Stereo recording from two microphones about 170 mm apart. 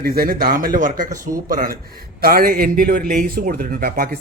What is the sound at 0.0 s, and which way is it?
Speech, 65° right (ahead or behind).